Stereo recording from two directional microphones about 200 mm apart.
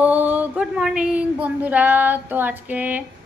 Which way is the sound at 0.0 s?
10° right (ahead or behind).